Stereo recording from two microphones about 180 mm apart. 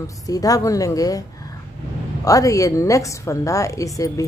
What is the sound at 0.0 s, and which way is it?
A woman's voice, 20° left (ahead or behind).